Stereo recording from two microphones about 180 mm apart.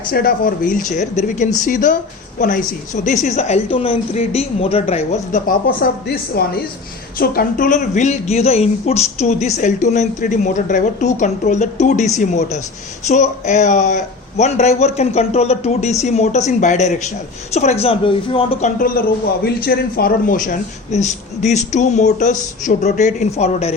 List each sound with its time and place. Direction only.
0.1 s speech: 55° left (ahead or behind); by 5.4 s 35° left (ahead or behind)
5.5 s a woman's voice: 50° left (ahead or behind)
7.2 s speech: 50° left (ahead or behind); by 18.7 s 30° left (ahead or behind)
19.5 s speech: 55° left (ahead or behind); by 23.7 s 35° left (ahead or behind)